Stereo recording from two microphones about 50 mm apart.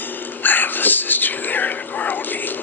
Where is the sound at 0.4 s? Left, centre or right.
Left.